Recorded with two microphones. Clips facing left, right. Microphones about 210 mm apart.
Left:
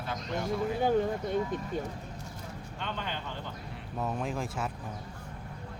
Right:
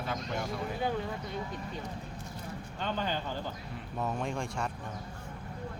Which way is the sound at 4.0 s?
Centre (ahead or behind).